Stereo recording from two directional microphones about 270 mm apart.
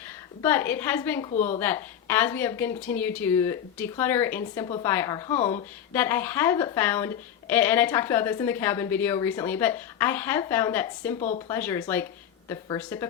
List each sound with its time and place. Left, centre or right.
0.4 s a woman's voice: centre
1.3 s speech: left
1.5 s a woman's voice: centre
11.2 s speech: left
11.4 s a woman's voice: centre